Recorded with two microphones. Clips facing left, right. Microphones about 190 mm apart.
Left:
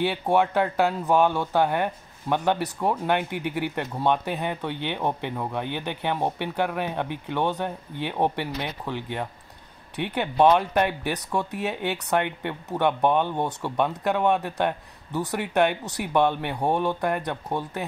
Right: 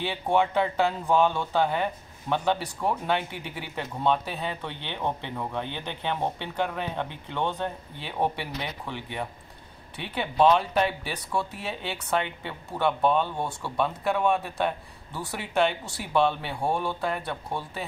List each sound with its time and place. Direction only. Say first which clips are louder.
0.0 s speech: left 3 dB; 10° left (ahead or behind)